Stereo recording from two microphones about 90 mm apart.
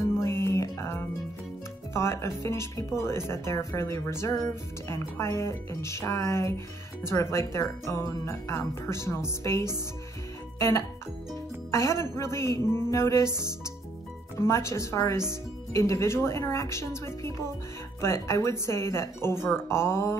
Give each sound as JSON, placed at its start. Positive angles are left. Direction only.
{"t": 0.2, "sound": "music", "side_deg": 30}
{"t": 2.0, "sound": "speech", "side_deg": 30}
{"t": 11.7, "sound": "speech", "side_deg": 30}